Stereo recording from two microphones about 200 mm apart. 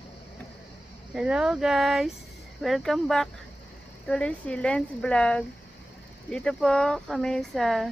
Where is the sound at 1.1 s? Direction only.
5° right (ahead or behind).